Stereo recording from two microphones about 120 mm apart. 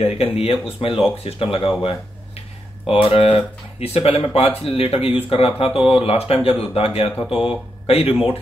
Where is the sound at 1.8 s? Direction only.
50° left (ahead or behind).